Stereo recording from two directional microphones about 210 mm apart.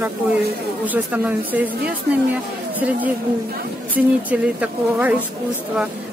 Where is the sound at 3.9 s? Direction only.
5° right (ahead or behind).